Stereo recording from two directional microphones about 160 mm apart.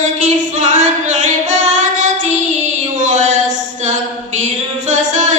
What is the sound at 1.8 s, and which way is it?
Child singing, 45° right (ahead or behind).